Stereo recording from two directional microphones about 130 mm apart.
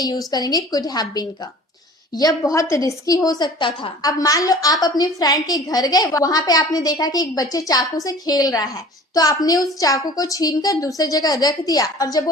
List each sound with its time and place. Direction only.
0.0 s a woman's voice: 30° left (ahead or behind)